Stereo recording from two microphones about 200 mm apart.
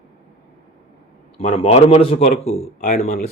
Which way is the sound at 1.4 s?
35° left (ahead or behind).